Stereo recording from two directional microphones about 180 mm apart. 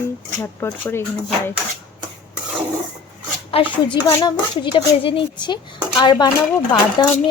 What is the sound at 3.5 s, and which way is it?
A woman's voice, 30° left (ahead or behind).